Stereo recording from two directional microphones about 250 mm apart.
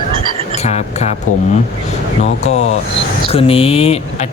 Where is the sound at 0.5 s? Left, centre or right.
Left.